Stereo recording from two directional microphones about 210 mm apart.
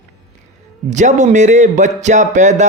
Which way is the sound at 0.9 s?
35° right (ahead or behind).